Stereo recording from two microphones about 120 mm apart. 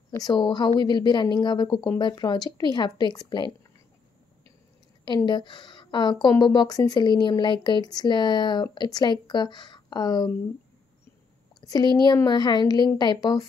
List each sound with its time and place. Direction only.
0.2 s speech: 35° left (ahead or behind)
5.0 s speech: 40° left (ahead or behind)
11.6 s a woman's voice: 35° left (ahead or behind)